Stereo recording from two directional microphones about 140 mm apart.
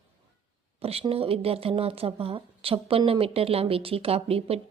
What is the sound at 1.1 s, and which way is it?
A woman's voice, 45° right (ahead or behind).